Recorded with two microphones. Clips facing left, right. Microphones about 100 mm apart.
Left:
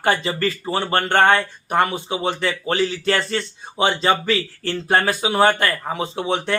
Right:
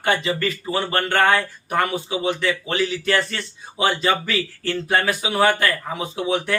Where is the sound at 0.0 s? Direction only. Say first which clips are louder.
Left 1 dB; 35° left (ahead or behind).